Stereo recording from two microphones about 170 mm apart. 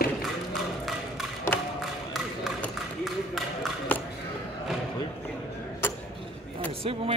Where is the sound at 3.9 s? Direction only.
10° left (ahead or behind).